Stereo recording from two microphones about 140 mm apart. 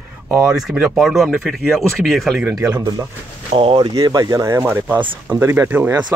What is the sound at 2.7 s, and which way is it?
Speech, 30° right (ahead or behind).